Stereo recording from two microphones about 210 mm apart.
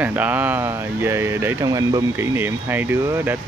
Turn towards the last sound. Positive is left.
turn(degrees=-10)  # may be behind; listen again after turning